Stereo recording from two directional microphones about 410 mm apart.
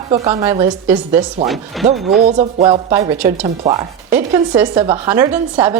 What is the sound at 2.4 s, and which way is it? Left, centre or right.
Speech, centre.